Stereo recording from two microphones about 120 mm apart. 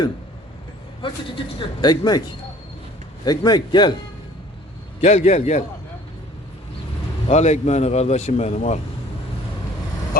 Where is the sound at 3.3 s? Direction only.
35° left (ahead or behind).